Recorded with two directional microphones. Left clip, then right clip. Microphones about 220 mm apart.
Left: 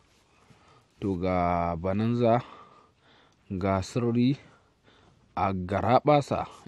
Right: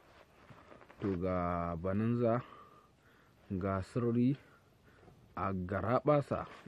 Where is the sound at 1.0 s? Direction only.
45° left (ahead or behind).